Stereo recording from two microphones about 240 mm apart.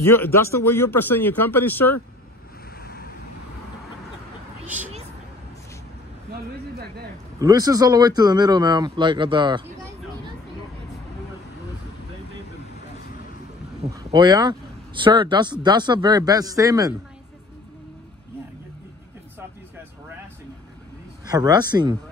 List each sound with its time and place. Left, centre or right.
0.0 s speech: centre
2.8 s vehicle: left
4.6 s speech: centre
7.3 s speech: centre
13.9 s speech: centre
21.3 s speech: centre